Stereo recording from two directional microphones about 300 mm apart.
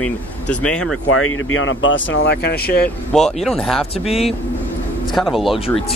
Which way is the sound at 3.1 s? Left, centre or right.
Centre.